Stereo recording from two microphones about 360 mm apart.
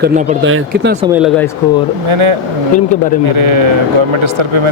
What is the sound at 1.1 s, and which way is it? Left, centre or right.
Speech, centre.